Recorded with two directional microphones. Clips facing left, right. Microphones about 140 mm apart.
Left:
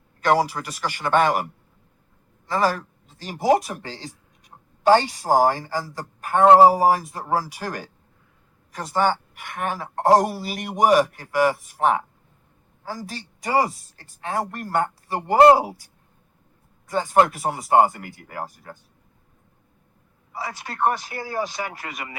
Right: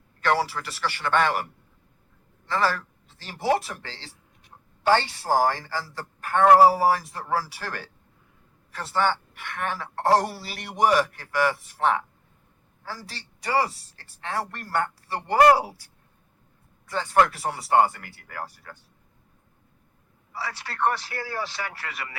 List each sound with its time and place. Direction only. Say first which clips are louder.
0.2 s speech: left 4 dB; 15° left (ahead or behind)
2.5 s speech: left 3 dB; 15° left (ahead or behind)
20.3 s speech: left 2 dB; 15° left (ahead or behind)